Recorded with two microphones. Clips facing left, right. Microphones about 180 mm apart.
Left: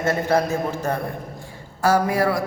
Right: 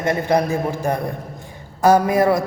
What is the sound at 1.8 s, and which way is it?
Mantra, 20° right (ahead or behind).